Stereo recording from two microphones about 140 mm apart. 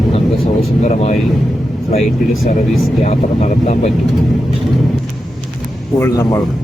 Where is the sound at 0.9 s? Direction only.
50° left (ahead or behind).